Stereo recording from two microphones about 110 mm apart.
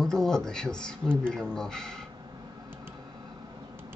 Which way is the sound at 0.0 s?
5° left (ahead or behind).